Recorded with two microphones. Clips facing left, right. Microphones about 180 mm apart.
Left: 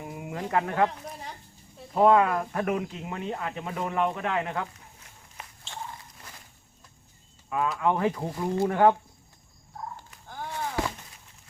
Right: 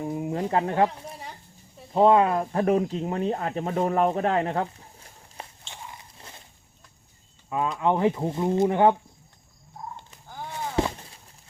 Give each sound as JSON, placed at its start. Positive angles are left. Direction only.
{"t": 0.0, "sound": "speech", "side_deg": -30}
{"t": 1.9, "sound": "speech", "side_deg": -25}
{"t": 5.7, "sound": "biting", "side_deg": -25}
{"t": 7.8, "sound": "speech", "side_deg": -20}
{"t": 10.5, "sound": "a sound", "side_deg": -20}